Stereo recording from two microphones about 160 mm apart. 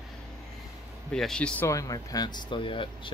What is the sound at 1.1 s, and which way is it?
Speech, 5° left (ahead or behind).